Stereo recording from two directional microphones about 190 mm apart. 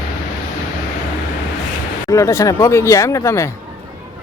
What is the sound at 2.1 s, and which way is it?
Speech, 15° left (ahead or behind).